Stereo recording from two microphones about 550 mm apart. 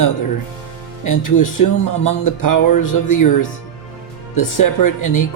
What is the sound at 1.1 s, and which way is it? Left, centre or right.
Speech, left.